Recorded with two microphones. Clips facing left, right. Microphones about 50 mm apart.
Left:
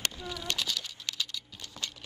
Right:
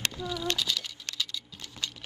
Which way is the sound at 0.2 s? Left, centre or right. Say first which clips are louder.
Right 5 dB; left.